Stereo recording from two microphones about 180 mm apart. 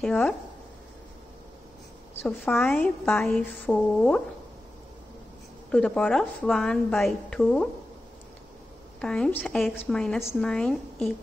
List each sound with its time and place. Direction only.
0.0 s a woman's voice: 5° left (ahead or behind)
2.2 s a woman's voice: 5° left (ahead or behind)
5.7 s a woman's voice: 5° left (ahead or behind)
9.0 s a woman's voice: 5° left (ahead or behind)